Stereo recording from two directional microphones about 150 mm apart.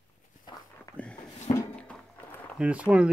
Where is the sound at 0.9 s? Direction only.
20° left (ahead or behind).